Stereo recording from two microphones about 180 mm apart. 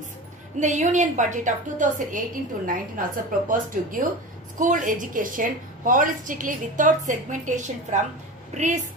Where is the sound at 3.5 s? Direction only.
50° right (ahead or behind).